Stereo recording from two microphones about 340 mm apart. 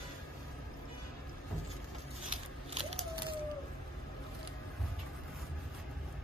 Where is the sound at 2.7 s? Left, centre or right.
Centre.